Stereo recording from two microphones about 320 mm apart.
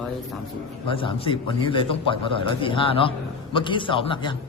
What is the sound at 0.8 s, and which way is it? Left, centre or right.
A man's voice, centre.